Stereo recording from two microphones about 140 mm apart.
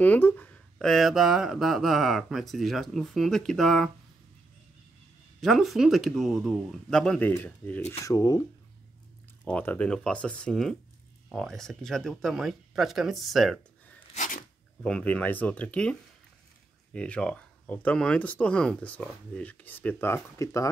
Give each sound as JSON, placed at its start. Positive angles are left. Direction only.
{"t": 0.0, "sound": "speech", "side_deg": 10}
{"t": 5.4, "sound": "speech", "side_deg": 0}
{"t": 8.0, "sound": "speech", "side_deg": 25}
{"t": 9.4, "sound": "speech", "side_deg": 10}
{"t": 14.1, "sound": "a sound", "side_deg": 65}
{"t": 14.8, "sound": "speech", "side_deg": 5}